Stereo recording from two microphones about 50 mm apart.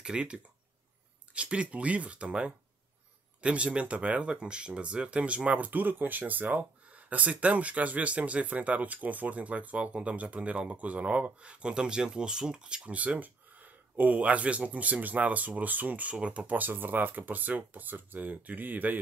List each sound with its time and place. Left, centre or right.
0.0 s speech: centre
16.5 s speech: right